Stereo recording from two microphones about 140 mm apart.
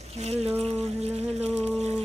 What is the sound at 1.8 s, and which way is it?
Music, 50° right (ahead or behind).